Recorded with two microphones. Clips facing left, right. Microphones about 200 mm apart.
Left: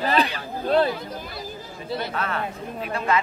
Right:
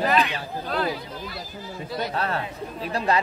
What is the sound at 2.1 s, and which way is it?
Speech, 35° right (ahead or behind).